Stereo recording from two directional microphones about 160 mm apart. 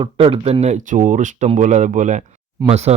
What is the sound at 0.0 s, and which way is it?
Speech, 35° right (ahead or behind).